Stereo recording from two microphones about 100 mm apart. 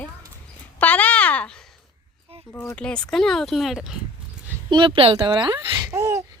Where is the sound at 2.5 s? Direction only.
25° left (ahead or behind).